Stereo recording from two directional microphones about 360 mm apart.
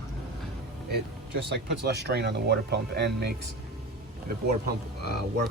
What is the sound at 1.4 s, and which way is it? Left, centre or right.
Speech, right.